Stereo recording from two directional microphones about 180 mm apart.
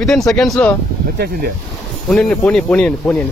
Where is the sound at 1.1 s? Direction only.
60° right (ahead or behind).